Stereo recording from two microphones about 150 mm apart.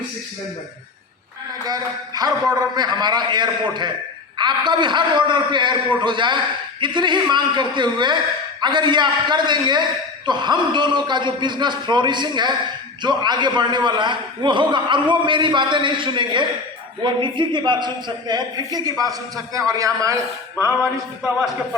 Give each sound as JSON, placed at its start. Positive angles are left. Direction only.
{"t": 1.6, "sound": "a man's voice", "side_deg": -25}